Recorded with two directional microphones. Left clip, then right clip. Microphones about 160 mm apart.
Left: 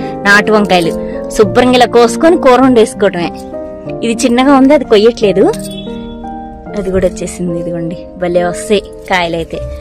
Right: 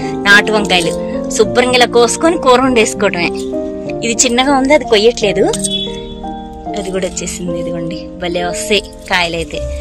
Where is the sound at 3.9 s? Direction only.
50° left (ahead or behind).